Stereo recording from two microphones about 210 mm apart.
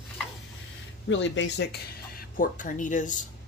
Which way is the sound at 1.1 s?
60° left (ahead or behind).